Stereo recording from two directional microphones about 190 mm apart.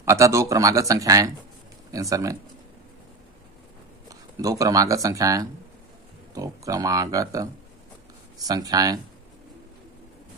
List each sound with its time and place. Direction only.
0.0 s speech: 15° right (ahead or behind)
4.1 s speech: 20° right (ahead or behind)